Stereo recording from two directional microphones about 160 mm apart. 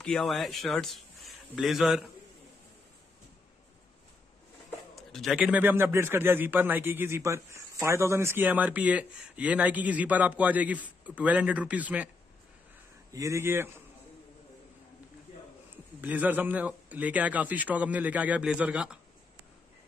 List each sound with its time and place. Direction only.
0.0 s speech: 5° left (ahead or behind)
4.6 s a sound: centre (ahead or behind)
5.4 s a man's voice: 10° right (ahead or behind)
13.1 s a man's voice: 20° right (ahead or behind)
16.0 s a man's voice: 10° right (ahead or behind)